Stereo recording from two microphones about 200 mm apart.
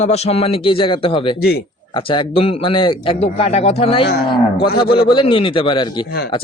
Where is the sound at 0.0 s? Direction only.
30° left (ahead or behind).